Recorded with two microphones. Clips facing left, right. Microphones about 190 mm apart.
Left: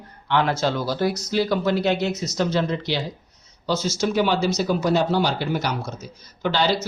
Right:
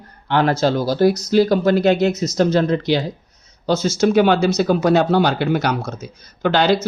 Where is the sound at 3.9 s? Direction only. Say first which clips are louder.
Right 7 dB; 60° right (ahead or behind).